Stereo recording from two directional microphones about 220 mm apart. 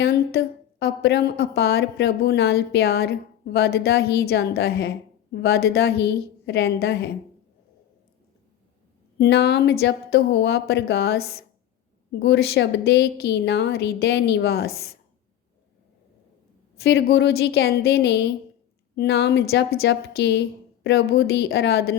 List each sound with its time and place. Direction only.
0.0 s a woman's voice: 45° left (ahead or behind)
9.1 s a woman's voice: 50° left (ahead or behind)
16.8 s a woman's voice: 50° left (ahead or behind)